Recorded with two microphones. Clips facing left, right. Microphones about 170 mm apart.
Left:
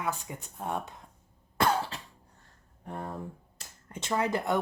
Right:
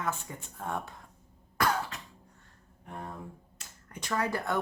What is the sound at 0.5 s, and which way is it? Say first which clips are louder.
Speech: left 2 dB; 20° left (ahead or behind).